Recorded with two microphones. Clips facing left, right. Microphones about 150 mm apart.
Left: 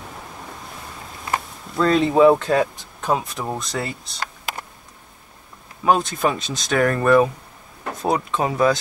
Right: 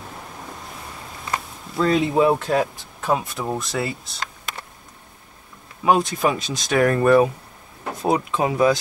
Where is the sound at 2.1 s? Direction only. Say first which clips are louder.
Left 6 dB; 90° left.